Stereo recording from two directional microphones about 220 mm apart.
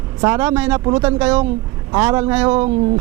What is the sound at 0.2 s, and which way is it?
Speech, 15° right (ahead or behind).